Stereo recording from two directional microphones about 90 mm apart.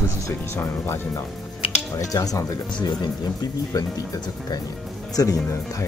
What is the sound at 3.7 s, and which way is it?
Speech, 45° left (ahead or behind).